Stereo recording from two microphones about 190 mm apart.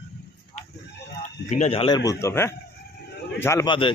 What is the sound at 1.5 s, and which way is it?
A man's voice, 35° left (ahead or behind).